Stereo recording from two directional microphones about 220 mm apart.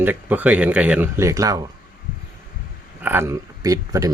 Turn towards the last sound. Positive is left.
turn(degrees=-15)  # may be behind; listen again after turning